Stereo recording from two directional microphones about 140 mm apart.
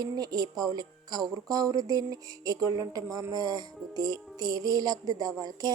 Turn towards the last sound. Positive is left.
turn(degrees=-25)  # may be behind; listen again after turning